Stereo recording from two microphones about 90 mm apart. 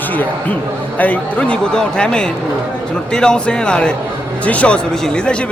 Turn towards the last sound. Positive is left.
turn(degrees=10)  # may be behind; listen again after turning